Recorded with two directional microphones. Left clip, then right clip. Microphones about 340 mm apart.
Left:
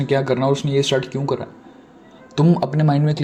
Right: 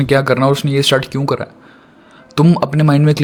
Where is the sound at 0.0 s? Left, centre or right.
Right.